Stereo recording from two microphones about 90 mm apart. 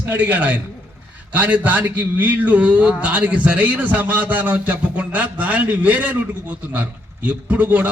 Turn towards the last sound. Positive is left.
turn(degrees=-20)  # may be behind; listen again after turning